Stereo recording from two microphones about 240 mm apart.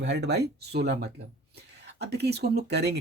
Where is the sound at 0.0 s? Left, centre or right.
Right.